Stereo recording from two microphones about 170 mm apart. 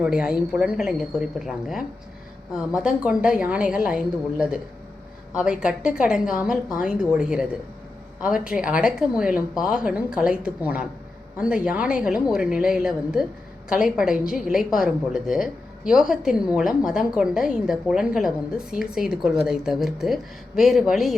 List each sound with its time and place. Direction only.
0.0 s a woman's voice: 5° right (ahead or behind)